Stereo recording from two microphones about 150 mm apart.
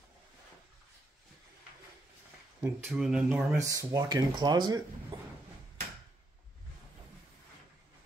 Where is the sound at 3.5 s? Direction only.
20° right (ahead or behind).